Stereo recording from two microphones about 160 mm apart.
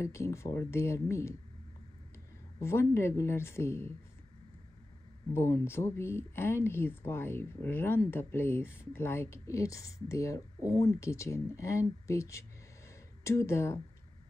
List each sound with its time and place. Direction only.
0.0 s speech: 15° left (ahead or behind)
2.6 s speech: 15° left (ahead or behind)
5.3 s speech: 15° left (ahead or behind)